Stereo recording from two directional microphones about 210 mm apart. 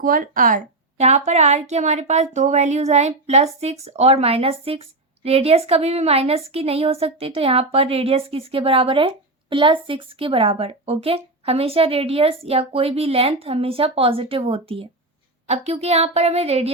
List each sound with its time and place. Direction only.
0.0 s speech: 40° right (ahead or behind)